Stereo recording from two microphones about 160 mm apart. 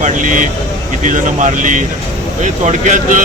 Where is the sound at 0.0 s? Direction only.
55° right (ahead or behind).